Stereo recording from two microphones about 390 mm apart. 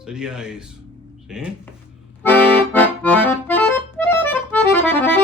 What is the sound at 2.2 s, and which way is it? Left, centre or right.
Accordion, centre.